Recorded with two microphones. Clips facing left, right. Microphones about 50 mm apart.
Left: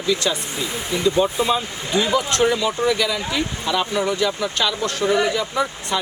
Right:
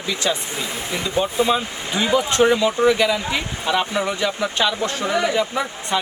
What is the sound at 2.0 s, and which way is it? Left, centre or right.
Speech, centre.